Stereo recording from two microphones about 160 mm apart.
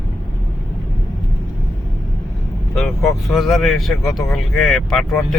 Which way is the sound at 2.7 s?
Centre (ahead or behind).